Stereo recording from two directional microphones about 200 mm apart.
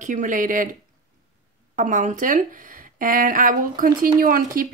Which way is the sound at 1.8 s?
40° right (ahead or behind).